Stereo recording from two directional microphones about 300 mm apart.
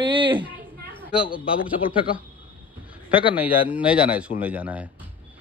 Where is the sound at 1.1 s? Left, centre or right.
Centre.